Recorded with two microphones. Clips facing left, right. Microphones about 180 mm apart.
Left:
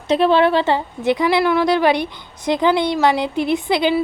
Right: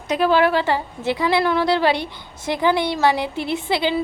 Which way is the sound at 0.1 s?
25° left (ahead or behind).